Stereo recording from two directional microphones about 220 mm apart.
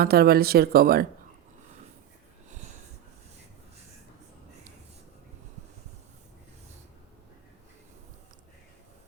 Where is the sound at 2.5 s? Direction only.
35° right (ahead or behind).